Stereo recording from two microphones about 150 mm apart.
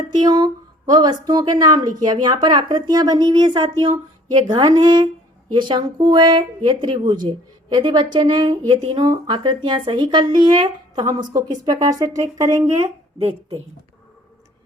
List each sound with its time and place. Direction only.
0.1 s speech: 25° right (ahead or behind)